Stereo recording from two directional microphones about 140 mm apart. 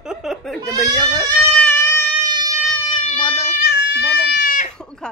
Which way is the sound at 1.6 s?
15° left (ahead or behind).